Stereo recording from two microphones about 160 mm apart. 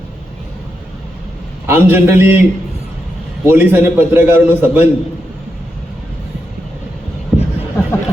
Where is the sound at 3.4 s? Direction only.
15° right (ahead or behind).